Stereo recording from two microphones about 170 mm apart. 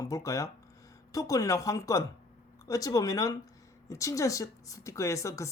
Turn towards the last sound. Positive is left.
turn(degrees=15)  # may be behind; listen again after turning